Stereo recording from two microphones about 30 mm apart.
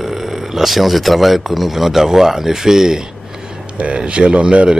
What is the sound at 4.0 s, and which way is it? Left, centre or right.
Speech, right.